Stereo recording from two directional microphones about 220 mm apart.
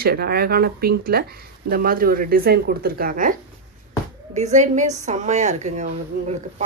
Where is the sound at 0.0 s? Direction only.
45° right (ahead or behind).